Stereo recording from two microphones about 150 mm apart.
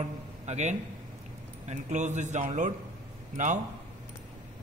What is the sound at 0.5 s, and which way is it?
A man's voice, 50° right (ahead or behind).